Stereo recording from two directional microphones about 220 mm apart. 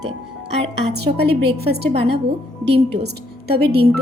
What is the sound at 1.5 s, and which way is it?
Speech, 45° right (ahead or behind).